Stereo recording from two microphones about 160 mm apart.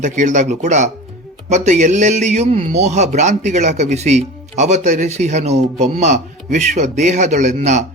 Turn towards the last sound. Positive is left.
turn(degrees=-45)  # may be behind; listen again after turning